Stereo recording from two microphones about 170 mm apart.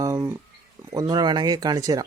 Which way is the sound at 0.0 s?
20° right (ahead or behind).